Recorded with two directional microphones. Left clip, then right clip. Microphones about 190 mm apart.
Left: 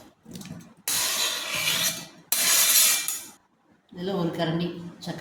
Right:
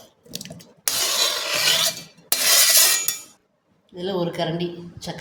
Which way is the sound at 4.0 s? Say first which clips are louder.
Right 3 dB; 45° right (ahead or behind).